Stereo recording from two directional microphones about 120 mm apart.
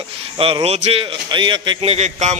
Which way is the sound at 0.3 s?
50° right (ahead or behind).